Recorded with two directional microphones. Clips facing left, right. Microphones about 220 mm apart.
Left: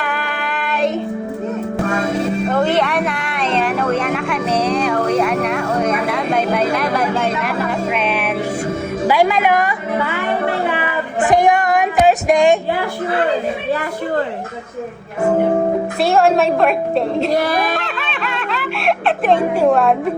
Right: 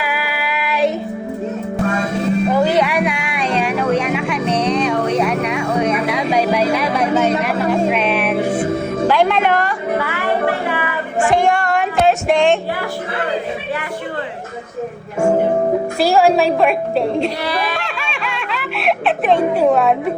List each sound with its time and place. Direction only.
0.0 s child singing: 5° right (ahead or behind)
2.5 s a sound: centre (ahead or behind)
9.0 s music: 5° left (ahead or behind)
11.9 s a sound: 15° left (ahead or behind)
16.0 s a woman's voice: centre (ahead or behind)
17.3 s speech: 45° left (ahead or behind)
17.7 s music: centre (ahead or behind)